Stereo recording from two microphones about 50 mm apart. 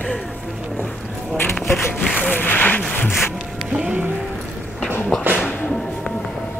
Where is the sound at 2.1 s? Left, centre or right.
Left.